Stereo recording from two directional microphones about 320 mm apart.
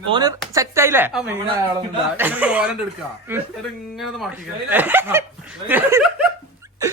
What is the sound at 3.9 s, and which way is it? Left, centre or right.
A man's voice, centre.